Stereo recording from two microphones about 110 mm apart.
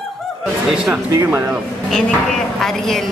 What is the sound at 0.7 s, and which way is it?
Speech, 10° right (ahead or behind).